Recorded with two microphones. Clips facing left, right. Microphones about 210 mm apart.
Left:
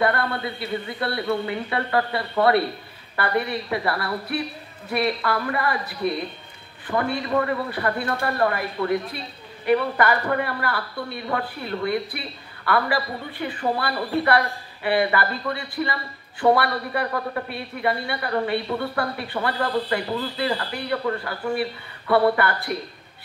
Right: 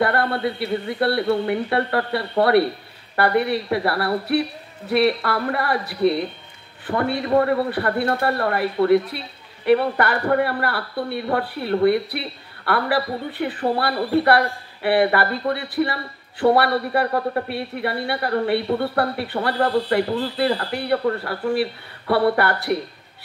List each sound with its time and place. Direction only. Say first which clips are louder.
0.0 s a woman's voice: right 3 dB; 60° right (ahead or behind)